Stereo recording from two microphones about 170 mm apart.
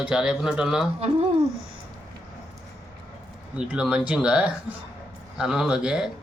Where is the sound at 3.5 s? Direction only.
5° right (ahead or behind).